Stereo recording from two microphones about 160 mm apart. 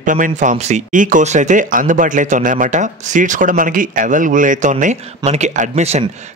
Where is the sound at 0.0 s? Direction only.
55° right (ahead or behind).